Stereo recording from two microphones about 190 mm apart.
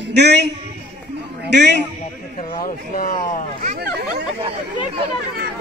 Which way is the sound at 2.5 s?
45° left (ahead or behind).